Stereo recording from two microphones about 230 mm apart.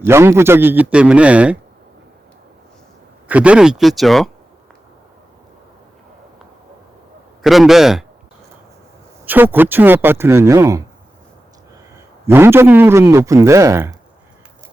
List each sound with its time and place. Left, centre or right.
0.0 s a man's voice: centre
3.2 s speech: centre
7.4 s speech: centre
9.2 s a man's voice: centre
12.2 s a man's voice: centre